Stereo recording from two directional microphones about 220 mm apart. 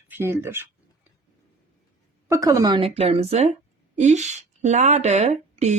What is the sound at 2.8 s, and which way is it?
A woman's voice, 25° right (ahead or behind).